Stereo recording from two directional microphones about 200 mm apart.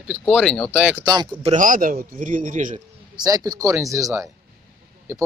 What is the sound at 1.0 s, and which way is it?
Speech, 20° right (ahead or behind).